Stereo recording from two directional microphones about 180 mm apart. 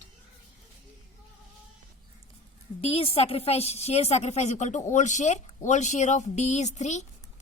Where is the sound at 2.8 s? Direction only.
30° left (ahead or behind).